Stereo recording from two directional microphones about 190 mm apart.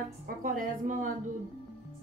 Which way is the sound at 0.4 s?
45° right (ahead or behind).